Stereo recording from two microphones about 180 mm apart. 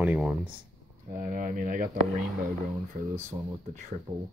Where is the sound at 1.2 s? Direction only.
45° right (ahead or behind).